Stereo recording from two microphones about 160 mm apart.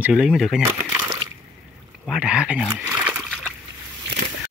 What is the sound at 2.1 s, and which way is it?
Speech, 5° right (ahead or behind).